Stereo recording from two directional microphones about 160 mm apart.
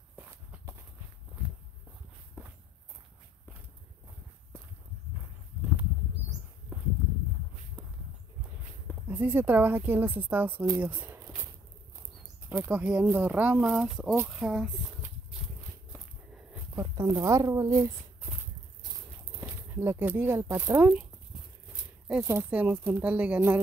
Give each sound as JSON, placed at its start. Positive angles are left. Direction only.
{"t": 0.2, "sound": "walk", "side_deg": -10}
{"t": 9.0, "sound": "speech", "side_deg": -10}
{"t": 10.8, "sound": "a sound", "side_deg": -10}
{"t": 12.4, "sound": "speech", "side_deg": -10}
{"t": 16.5, "sound": "speech", "side_deg": -20}
{"t": 19.7, "sound": "speech", "side_deg": -15}
{"t": 22.0, "sound": "speech", "side_deg": -15}